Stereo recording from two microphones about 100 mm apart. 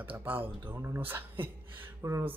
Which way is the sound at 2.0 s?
30° right (ahead or behind).